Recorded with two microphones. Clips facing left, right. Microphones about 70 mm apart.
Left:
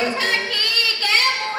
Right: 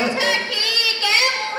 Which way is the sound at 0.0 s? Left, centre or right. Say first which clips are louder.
Right 1 dB; left.